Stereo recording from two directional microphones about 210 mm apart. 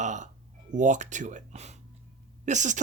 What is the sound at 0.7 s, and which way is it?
Speech, 35° right (ahead or behind).